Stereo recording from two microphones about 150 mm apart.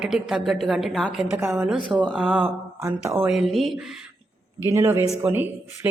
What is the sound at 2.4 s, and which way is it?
Speech, 20° right (ahead or behind).